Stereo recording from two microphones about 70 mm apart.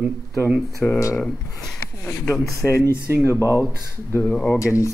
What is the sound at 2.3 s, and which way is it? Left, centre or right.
Speech, left.